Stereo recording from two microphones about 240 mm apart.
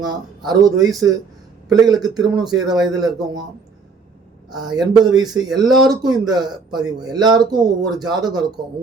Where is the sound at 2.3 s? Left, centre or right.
Centre.